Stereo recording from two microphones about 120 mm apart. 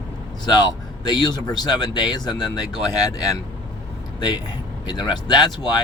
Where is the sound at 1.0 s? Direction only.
40° left (ahead or behind).